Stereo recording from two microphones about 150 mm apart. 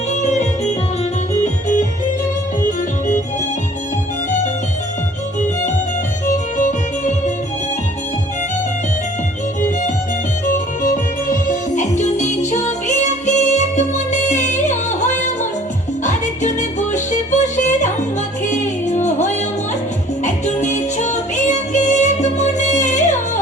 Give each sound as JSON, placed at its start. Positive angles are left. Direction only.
{"t": 0.2, "sound": "music", "side_deg": 50}
{"t": 6.2, "sound": "music", "side_deg": 55}
{"t": 9.6, "sound": "music", "side_deg": 60}